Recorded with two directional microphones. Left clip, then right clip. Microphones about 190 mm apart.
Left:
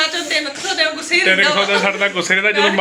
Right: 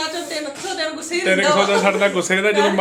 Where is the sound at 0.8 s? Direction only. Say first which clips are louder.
Left 7 dB; 20° right (ahead or behind).